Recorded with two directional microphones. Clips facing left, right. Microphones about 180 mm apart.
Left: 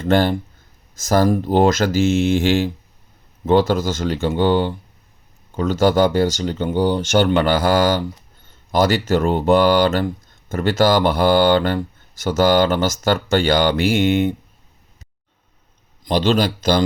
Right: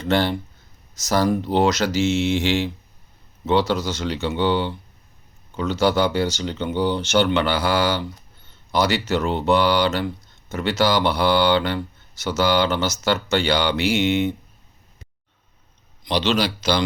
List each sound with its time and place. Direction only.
0.0 s speech: 50° left (ahead or behind)
16.0 s speech: 50° left (ahead or behind)